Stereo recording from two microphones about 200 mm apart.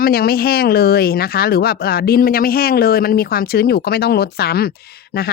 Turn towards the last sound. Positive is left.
turn(degrees=50)  # may be behind; listen again after turning